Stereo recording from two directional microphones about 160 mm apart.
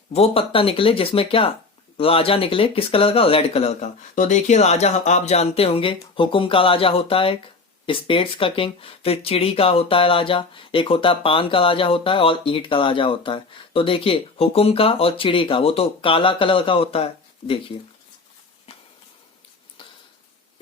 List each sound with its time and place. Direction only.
0.1 s speech: 40° left (ahead or behind)